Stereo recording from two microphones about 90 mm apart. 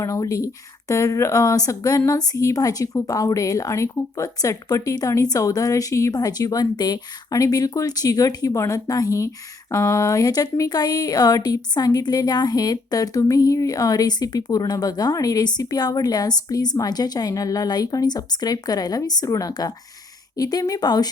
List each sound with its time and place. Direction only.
0.0 s a woman's voice: 40° left (ahead or behind)